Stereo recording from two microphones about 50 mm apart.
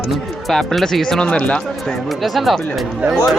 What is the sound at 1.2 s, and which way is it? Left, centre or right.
Speech, left.